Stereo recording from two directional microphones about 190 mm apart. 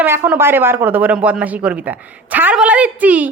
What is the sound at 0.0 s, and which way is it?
Speech, 10° right (ahead or behind).